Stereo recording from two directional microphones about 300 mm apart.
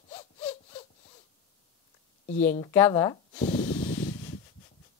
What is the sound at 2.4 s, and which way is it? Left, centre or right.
Speech, centre.